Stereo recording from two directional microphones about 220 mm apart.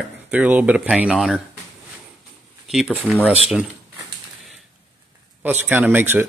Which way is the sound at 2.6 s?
Centre (ahead or behind).